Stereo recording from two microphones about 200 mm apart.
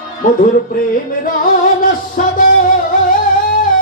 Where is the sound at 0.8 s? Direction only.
45° left (ahead or behind).